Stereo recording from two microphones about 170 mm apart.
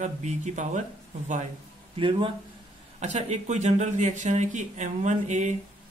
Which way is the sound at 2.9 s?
40° right (ahead or behind).